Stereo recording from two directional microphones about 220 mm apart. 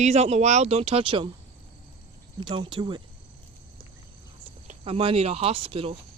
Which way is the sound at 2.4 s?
20° right (ahead or behind).